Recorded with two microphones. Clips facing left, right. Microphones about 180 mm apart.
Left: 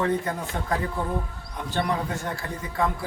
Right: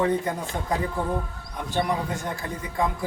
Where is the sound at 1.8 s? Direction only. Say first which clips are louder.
Right 1 dB; 15° right (ahead or behind).